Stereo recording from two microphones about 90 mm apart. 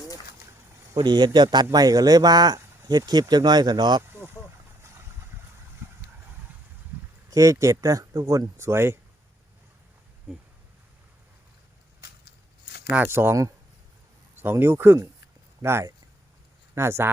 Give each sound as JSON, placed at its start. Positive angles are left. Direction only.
{"t": 1.0, "sound": "a man's voice", "side_deg": -55}
{"t": 7.3, "sound": "speech", "side_deg": -40}
{"t": 13.0, "sound": "speech", "side_deg": -25}